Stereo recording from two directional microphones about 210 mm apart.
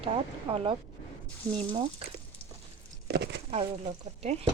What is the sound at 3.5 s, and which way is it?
Speech, 25° right (ahead or behind).